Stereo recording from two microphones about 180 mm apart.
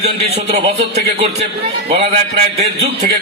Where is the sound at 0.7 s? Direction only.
35° right (ahead or behind).